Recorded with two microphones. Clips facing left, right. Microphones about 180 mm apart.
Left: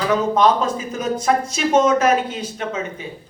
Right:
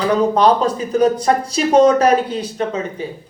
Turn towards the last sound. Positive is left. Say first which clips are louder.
# right 5 dB
turn(degrees=-35)  # may be behind; listen again after turning